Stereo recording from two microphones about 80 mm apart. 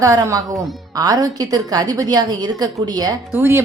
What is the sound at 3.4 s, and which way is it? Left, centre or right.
Speech, right.